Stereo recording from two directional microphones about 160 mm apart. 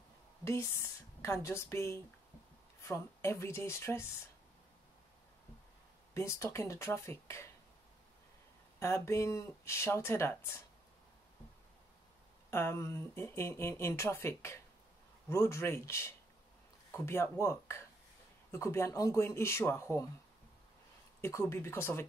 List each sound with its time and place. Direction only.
0.5 s speech: 15° left (ahead or behind)
6.1 s speech: 15° left (ahead or behind)
8.7 s speech: 15° left (ahead or behind)
12.4 s speech: 15° left (ahead or behind)
21.2 s speech: 15° left (ahead or behind)